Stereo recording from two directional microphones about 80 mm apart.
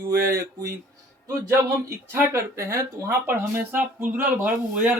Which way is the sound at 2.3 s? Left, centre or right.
Right.